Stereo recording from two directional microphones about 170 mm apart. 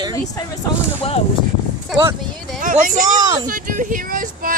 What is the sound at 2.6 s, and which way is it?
Speech, 50° right (ahead or behind).